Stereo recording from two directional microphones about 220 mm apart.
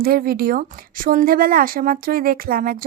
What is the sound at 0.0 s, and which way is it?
Speech, 40° right (ahead or behind).